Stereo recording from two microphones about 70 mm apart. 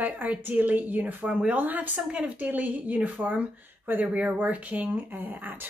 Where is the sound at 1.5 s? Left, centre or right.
Right.